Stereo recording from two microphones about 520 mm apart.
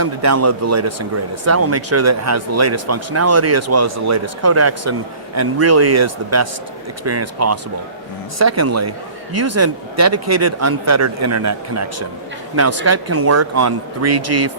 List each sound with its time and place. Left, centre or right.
0.0 s speech: right